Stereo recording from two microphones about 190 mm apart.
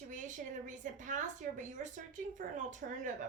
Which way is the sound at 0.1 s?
40° right (ahead or behind).